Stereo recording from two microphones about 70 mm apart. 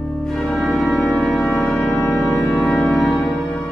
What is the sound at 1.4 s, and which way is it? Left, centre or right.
Music, centre.